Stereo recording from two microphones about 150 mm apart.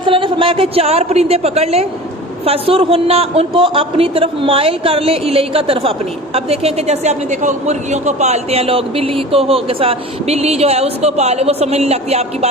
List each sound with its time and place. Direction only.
0.0 s a woman's voice: 35° right (ahead or behind)